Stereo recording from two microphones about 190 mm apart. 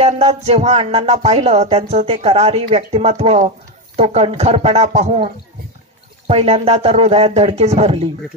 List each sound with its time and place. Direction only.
0.0 s speech: 35° right (ahead or behind)